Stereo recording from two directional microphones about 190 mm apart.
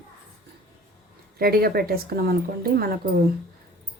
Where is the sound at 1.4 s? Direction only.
55° right (ahead or behind).